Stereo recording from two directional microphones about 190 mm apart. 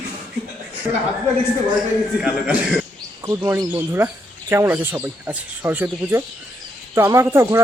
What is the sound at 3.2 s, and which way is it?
Speech, 10° right (ahead or behind).